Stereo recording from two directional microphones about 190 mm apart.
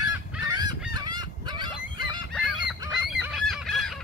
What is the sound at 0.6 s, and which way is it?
Goose, 20° right (ahead or behind).